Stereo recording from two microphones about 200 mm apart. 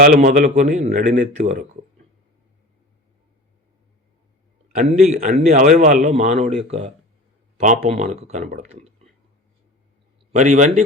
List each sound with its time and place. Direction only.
0.0 s a man's voice: 45° right (ahead or behind)
4.8 s a man's voice: 35° right (ahead or behind)
10.3 s a man's voice: 35° right (ahead or behind)